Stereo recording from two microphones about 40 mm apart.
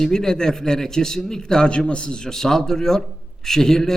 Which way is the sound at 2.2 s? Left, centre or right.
Centre.